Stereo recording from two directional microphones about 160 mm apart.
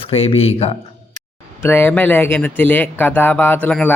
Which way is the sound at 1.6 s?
15° left (ahead or behind).